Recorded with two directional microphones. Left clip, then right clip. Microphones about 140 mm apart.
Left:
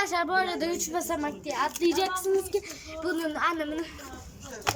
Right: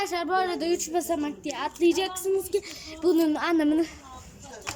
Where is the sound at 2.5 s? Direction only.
35° right (ahead or behind).